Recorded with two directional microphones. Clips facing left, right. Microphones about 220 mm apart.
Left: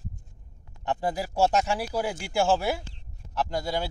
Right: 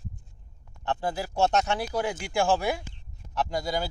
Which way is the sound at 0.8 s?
15° left (ahead or behind).